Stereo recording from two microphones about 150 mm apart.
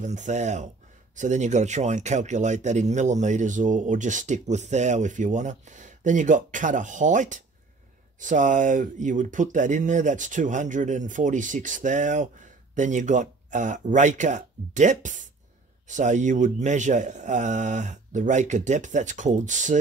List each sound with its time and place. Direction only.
0.0 s speech: 55° right (ahead or behind)